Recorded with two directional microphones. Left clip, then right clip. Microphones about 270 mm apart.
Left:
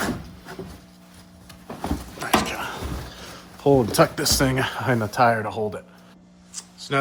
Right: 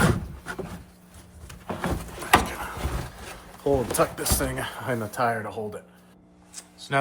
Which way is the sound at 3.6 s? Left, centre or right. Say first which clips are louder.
Left 5 dB; left.